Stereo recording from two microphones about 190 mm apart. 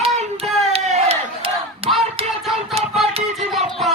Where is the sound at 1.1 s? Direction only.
30° right (ahead or behind).